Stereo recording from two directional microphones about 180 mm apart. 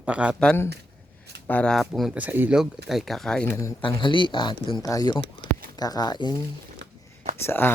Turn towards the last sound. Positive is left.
turn(degrees=15)  # may be behind; listen again after turning